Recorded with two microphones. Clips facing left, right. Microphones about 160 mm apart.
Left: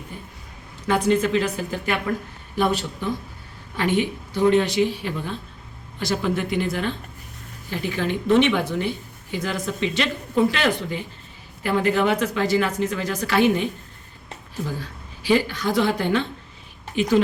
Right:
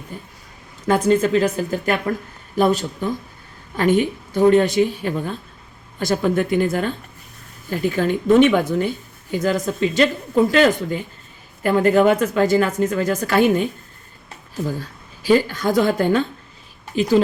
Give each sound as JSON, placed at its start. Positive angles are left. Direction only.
{"t": 0.9, "sound": "a woman's voice", "side_deg": -45}
{"t": 14.8, "sound": "a woman's voice", "side_deg": -45}